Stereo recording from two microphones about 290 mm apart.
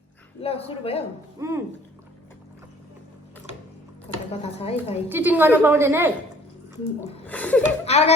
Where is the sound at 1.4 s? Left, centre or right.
Centre.